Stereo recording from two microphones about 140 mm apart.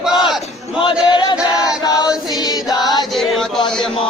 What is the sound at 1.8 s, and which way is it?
Choir, 30° left (ahead or behind).